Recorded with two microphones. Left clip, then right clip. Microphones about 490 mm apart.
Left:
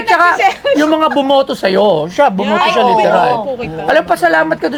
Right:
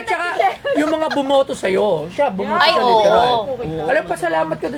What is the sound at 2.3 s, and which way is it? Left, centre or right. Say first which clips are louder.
Speech: left 5 dB; left.